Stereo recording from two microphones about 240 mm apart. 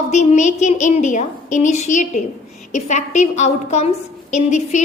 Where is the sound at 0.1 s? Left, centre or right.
Left.